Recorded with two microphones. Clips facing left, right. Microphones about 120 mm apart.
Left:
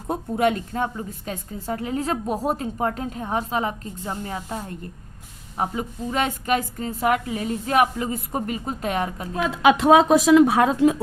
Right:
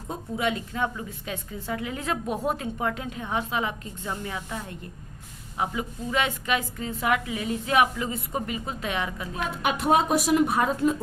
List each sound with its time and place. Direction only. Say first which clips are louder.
0.1 s a woman's voice: left 7 dB; 50° left (ahead or behind)
9.4 s speech: left 9 dB; 90° left